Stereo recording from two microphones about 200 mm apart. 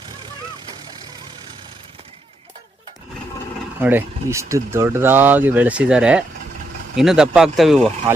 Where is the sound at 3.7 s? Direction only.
10° right (ahead or behind).